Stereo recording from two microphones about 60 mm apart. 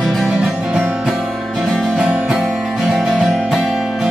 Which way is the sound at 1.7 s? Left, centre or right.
Centre.